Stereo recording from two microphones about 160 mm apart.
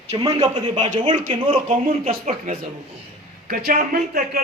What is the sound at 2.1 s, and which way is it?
A man's voice, 60° right (ahead or behind).